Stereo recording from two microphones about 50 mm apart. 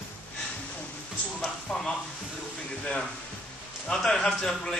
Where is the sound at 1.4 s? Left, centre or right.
Centre.